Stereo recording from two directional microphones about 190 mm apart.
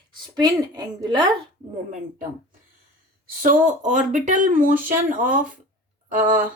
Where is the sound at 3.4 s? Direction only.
45° right (ahead or behind).